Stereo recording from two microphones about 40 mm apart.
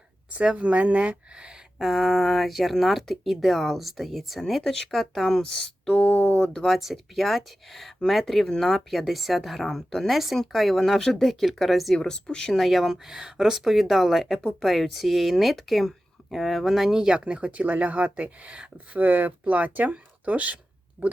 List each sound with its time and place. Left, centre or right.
0.3 s speech: right
1.8 s speech: centre
5.3 s speech: centre
5.9 s speech: left
6.7 s speech: centre
11.9 s speech: left
12.5 s speech: centre
13.1 s speech: centre
17.2 s speech: right
18.9 s speech: right
21.0 s a sound: centre